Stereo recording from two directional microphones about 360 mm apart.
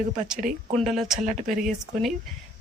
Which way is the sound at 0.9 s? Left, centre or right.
Centre.